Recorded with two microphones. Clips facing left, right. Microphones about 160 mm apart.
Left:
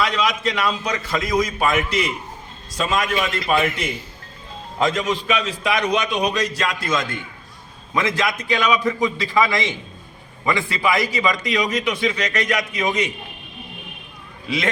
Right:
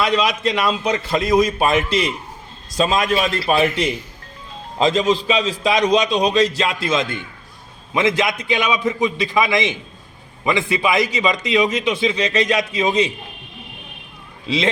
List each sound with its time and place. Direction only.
0.5 s a man's voice: 20° right (ahead or behind)
14.4 s a man's voice: 25° right (ahead or behind)